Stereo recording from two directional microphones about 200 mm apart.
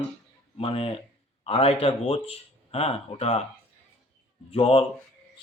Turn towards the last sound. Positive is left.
turn(degrees=30)  # may be behind; listen again after turning